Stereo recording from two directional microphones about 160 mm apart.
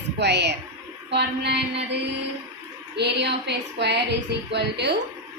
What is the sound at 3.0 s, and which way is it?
A woman's voice, 90° right.